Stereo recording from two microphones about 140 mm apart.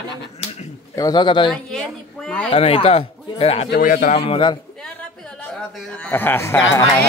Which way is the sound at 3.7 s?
80° left.